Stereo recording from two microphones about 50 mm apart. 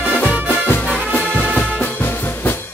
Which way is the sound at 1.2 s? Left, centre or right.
Left.